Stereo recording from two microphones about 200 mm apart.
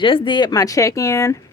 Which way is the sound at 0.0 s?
25° left (ahead or behind).